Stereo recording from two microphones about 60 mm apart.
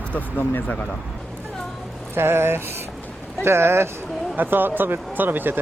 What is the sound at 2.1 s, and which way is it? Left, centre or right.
Speech, right.